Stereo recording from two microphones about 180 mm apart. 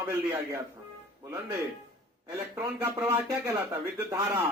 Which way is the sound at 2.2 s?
15° right (ahead or behind).